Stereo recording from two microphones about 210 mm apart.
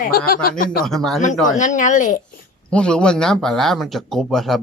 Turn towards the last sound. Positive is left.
turn(degrees=0)  # may be behind; listen again after turning